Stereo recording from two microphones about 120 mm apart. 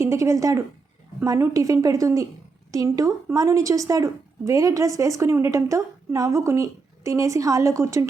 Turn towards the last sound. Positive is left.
turn(degrees=-25)  # may be behind; listen again after turning